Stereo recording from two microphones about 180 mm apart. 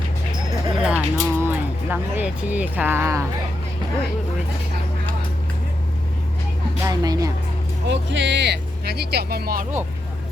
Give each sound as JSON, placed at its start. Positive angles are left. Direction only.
{"t": 0.8, "sound": "speech", "side_deg": -5}
{"t": 6.8, "sound": "speech", "side_deg": -20}
{"t": 7.9, "sound": "speech", "side_deg": -75}